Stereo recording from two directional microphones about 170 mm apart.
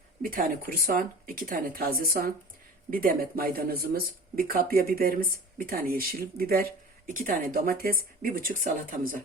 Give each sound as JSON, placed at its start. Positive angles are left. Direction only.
{"t": 0.2, "sound": "speech", "side_deg": -55}